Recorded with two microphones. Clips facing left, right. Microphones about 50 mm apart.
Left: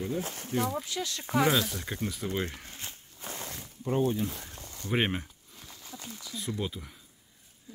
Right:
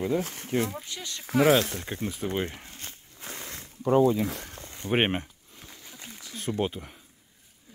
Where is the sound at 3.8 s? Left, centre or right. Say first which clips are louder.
Right 7 dB; right.